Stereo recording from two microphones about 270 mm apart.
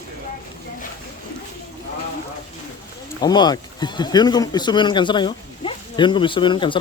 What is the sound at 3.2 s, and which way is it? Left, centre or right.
Speech, centre.